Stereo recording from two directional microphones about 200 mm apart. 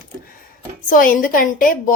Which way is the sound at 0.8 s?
45° left (ahead or behind).